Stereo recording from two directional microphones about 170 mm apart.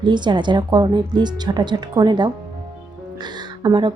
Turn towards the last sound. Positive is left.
turn(degrees=-25)  # may be behind; listen again after turning